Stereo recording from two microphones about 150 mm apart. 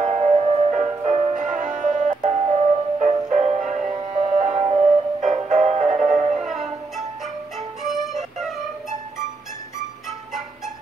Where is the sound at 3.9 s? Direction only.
35° right (ahead or behind).